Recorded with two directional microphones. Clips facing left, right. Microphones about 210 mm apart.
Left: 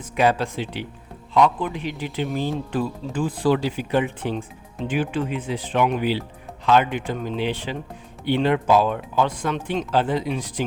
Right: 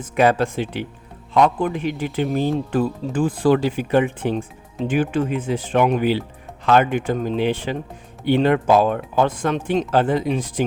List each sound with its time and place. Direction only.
0.2 s speech: 50° right (ahead or behind)